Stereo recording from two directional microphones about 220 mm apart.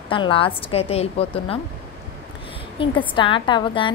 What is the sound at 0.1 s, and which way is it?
A woman's voice, 25° left (ahead or behind).